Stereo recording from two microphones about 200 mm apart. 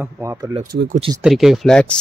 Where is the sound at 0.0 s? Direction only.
15° right (ahead or behind).